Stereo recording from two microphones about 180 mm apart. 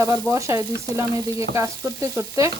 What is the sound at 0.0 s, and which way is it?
Stir, 15° right (ahead or behind).